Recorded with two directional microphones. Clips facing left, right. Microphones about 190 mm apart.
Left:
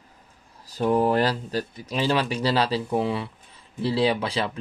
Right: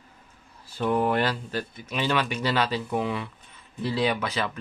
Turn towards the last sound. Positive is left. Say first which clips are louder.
# left 3 dB
turn(degrees=30)  # may be behind; listen again after turning